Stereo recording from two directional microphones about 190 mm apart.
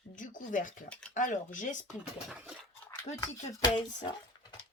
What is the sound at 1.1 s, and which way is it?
Speech, 45° left (ahead or behind).